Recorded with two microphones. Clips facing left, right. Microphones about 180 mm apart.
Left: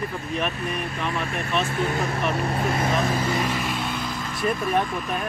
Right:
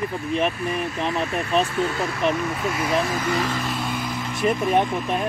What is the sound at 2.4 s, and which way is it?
Speech, 35° left (ahead or behind).